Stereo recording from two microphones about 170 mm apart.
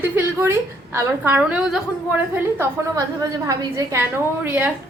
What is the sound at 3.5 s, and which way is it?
A woman's voice, 20° right (ahead or behind).